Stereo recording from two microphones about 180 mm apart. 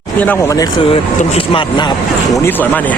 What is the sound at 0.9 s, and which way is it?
Speech, 30° left (ahead or behind).